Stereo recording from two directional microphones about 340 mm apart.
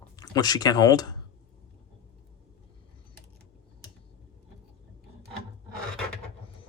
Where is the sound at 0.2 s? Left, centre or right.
Centre.